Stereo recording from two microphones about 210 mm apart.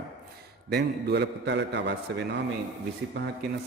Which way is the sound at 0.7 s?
55° right (ahead or behind).